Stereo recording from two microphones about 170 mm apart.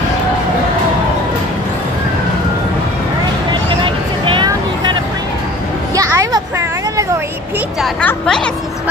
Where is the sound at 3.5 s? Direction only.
30° right (ahead or behind).